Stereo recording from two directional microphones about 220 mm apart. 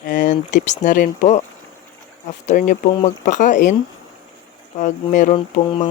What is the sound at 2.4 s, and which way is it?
Speech, 35° left (ahead or behind).